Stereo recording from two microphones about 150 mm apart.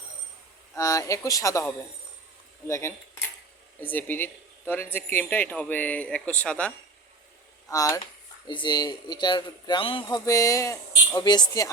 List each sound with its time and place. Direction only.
0.8 s speech: 20° left (ahead or behind); by 6.7 s 5° left (ahead or behind)
7.7 s speech: 25° left (ahead or behind)